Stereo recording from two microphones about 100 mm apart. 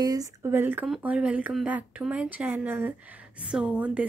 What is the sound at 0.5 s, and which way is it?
A woman's voice, 20° right (ahead or behind).